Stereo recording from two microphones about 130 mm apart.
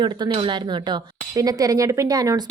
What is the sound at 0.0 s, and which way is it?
Speech, 35° right (ahead or behind).